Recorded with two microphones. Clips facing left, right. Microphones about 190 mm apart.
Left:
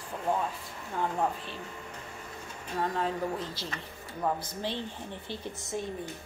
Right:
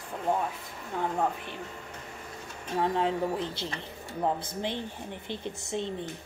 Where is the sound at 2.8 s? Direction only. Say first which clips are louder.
Right 3 dB; 20° right (ahead or behind).